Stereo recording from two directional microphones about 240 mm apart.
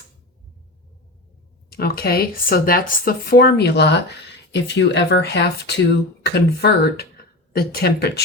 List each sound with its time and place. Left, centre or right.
1.7 s speech: left